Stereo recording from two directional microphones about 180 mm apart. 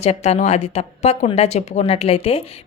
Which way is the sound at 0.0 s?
35° left (ahead or behind).